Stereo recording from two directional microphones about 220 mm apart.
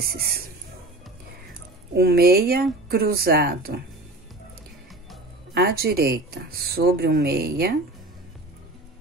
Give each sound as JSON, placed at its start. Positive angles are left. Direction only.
{"t": 0.1, "sound": "speech", "side_deg": -45}
{"t": 2.0, "sound": "speech", "side_deg": -45}
{"t": 5.5, "sound": "speech", "side_deg": -45}